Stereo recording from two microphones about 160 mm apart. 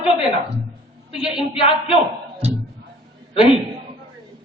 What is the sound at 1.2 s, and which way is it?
Speech, 30° left (ahead or behind).